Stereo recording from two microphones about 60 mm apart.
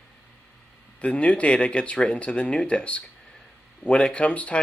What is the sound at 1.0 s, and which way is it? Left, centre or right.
Speech, left.